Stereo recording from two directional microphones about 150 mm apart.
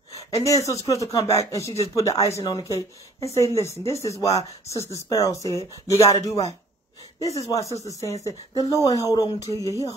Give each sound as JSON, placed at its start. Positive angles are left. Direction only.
{"t": 0.1, "sound": "speech", "side_deg": 20}